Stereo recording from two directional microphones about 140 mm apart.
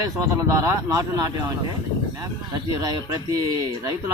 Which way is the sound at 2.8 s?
30° right (ahead or behind).